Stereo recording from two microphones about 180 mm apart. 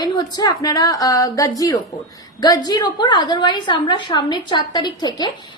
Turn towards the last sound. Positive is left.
turn(degrees=20)  # may be behind; listen again after turning